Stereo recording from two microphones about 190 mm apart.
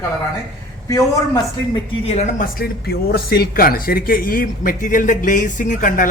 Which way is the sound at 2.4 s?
50° left (ahead or behind).